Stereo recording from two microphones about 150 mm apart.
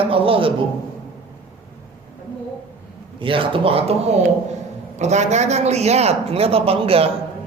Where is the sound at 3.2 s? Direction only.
35° right (ahead or behind).